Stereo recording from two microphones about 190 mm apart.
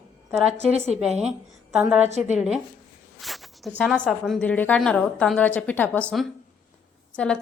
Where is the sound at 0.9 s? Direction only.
35° right (ahead or behind).